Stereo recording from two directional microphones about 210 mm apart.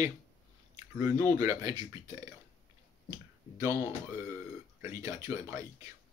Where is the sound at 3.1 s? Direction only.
15° right (ahead or behind).